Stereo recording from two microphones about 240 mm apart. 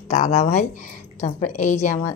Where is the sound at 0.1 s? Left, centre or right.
Left.